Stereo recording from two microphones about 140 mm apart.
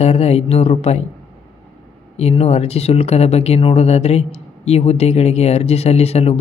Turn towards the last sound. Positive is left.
turn(degrees=45)  # may be behind; listen again after turning